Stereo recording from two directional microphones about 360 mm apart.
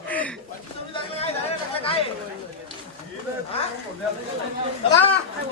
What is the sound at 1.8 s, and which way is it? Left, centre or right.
Speech, centre.